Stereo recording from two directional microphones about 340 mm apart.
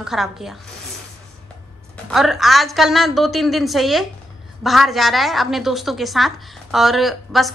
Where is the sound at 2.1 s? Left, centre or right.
Centre.